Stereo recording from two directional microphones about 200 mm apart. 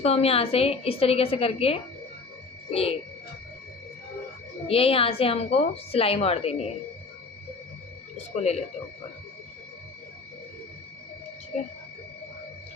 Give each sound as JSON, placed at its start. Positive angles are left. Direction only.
{"t": 0.0, "sound": "a woman's voice", "side_deg": 30}
{"t": 2.6, "sound": "a sound", "side_deg": 30}
{"t": 4.7, "sound": "a woman's voice", "side_deg": 30}
{"t": 8.4, "sound": "speech", "side_deg": 35}
{"t": 11.5, "sound": "speech", "side_deg": 35}